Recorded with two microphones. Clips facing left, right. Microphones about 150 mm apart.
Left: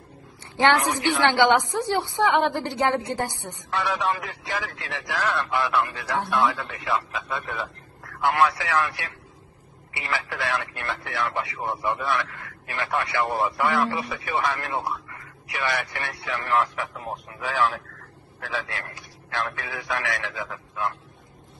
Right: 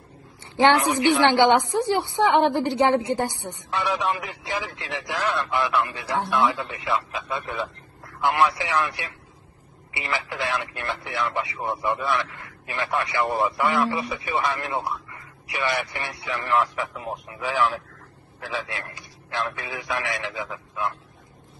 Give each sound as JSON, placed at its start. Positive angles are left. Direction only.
{"t": 0.6, "sound": "a woman's voice", "side_deg": -20}
{"t": 8.2, "sound": "speech", "side_deg": -10}